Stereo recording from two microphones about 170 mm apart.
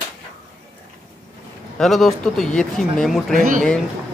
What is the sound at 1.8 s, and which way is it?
Speech, centre (ahead or behind).